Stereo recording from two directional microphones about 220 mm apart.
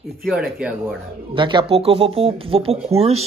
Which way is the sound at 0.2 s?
5° right (ahead or behind).